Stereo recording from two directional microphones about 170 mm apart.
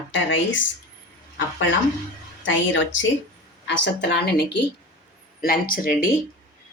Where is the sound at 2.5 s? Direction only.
90° left; by 4.4 s 75° left (ahead or behind).